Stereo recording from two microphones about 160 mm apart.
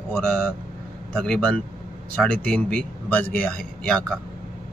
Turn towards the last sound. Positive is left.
turn(degrees=5)  # may be behind; listen again after turning